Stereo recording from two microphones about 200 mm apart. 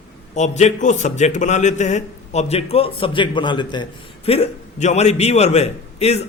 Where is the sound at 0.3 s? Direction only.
35° left (ahead or behind).